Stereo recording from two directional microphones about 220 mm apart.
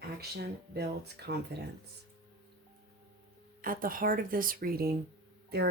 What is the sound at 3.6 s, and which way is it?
Speech, 40° right (ahead or behind).